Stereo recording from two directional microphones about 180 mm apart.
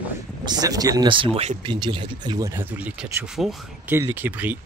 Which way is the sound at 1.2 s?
35° right (ahead or behind).